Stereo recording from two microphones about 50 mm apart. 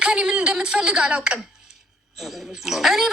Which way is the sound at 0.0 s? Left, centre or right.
Centre.